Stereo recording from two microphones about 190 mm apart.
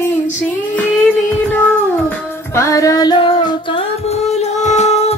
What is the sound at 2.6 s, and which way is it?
Music, 15° left (ahead or behind).